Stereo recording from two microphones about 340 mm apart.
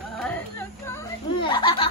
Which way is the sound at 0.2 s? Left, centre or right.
Centre.